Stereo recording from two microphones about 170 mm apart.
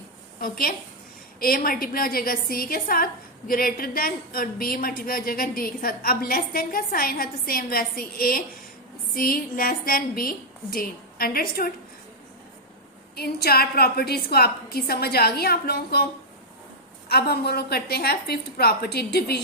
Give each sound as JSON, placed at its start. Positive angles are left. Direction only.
{"t": 0.3, "sound": "a woman's voice", "side_deg": 60}
{"t": 13.1, "sound": "a woman's voice", "side_deg": 65}
{"t": 17.1, "sound": "a woman's voice", "side_deg": 65}